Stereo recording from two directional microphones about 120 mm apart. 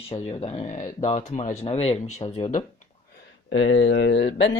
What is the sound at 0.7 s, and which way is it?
Speech, 75° left (ahead or behind).